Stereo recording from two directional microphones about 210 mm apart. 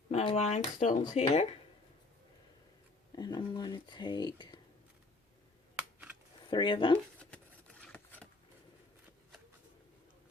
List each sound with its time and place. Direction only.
0.1 s speech: 30° left (ahead or behind)
3.2 s speech: 20° left (ahead or behind)
6.5 s speech: 20° left (ahead or behind)
6.9 s a sound: 5° left (ahead or behind)